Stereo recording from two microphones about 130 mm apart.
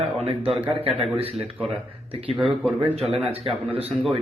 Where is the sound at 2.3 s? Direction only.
Centre (ahead or behind).